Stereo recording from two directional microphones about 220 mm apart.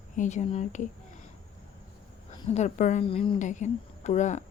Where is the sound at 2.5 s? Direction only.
30° left (ahead or behind).